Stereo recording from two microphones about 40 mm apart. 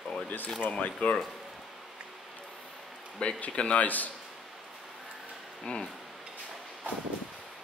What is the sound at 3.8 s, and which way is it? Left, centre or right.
Speech, left.